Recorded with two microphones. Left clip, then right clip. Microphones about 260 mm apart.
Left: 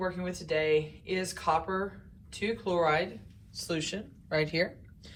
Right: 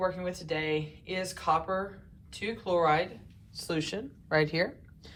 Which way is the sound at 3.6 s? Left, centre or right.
Centre.